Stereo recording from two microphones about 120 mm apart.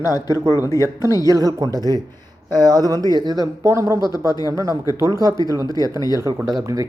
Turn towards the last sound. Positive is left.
turn(degrees=-30)  # may be behind; listen again after turning